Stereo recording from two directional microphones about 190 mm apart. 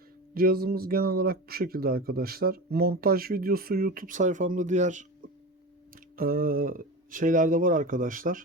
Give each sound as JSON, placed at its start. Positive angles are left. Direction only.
{"t": 0.3, "sound": "speech", "side_deg": -50}
{"t": 6.1, "sound": "speech", "side_deg": -50}